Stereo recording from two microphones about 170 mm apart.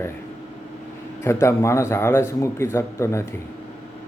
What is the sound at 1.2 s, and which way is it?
Speech, 15° left (ahead or behind).